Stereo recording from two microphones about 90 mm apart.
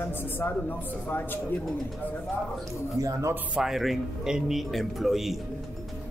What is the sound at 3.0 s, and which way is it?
Speech, 35° right (ahead or behind).